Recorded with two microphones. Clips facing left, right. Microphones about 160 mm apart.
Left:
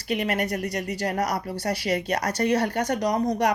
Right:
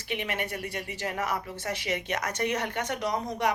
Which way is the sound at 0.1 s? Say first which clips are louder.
Left 7 dB; 40° left (ahead or behind).